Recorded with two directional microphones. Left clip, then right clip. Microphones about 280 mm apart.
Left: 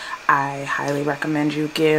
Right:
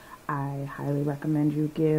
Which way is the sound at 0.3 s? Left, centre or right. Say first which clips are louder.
Left 14 dB; centre.